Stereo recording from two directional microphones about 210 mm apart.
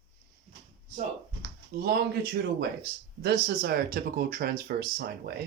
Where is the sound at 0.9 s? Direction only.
45° right (ahead or behind).